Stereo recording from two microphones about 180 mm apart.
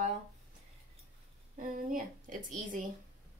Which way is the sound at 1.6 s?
50° right (ahead or behind).